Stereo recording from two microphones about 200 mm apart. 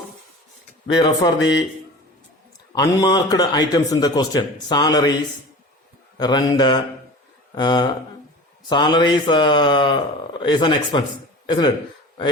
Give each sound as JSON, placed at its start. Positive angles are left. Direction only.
{"t": 0.9, "sound": "a man's voice", "side_deg": 20}
{"t": 1.4, "sound": "speech", "side_deg": 60}
{"t": 2.7, "sound": "a man's voice", "side_deg": 20}
{"t": 6.1, "sound": "a man's voice", "side_deg": 20}